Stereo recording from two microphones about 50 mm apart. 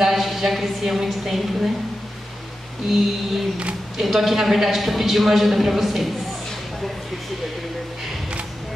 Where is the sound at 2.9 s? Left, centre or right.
Centre.